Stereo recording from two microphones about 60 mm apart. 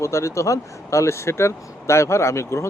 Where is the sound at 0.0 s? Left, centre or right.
Left.